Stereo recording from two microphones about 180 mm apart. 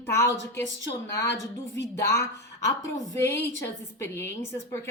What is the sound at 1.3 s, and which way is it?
Speech, 75° left (ahead or behind).